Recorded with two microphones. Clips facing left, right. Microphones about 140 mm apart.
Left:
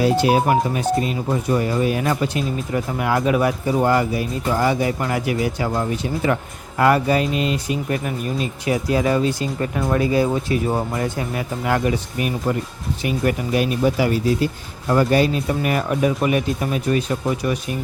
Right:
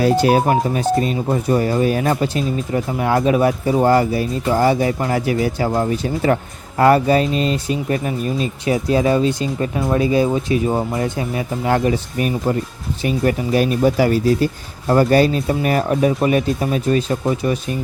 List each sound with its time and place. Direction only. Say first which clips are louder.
0.0 s speech: right 2 dB; 45° right (ahead or behind); by 17.6 s 30° right (ahead or behind)